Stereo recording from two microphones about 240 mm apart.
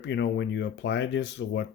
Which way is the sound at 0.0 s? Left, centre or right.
Left.